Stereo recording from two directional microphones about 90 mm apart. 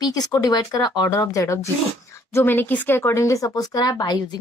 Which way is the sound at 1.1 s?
35° left (ahead or behind).